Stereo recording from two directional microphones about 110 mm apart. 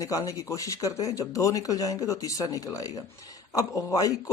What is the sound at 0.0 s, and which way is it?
Speech, 30° left (ahead or behind).